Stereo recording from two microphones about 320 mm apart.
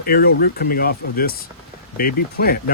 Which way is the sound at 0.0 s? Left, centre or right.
Left.